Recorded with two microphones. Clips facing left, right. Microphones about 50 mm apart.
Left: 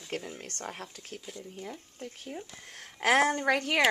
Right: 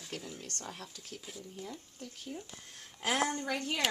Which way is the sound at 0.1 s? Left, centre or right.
Left.